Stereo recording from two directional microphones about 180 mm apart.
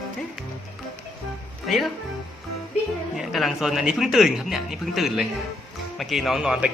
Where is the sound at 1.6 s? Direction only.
Centre (ahead or behind).